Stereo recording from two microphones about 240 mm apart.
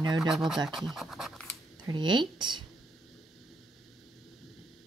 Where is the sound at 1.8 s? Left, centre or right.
Centre.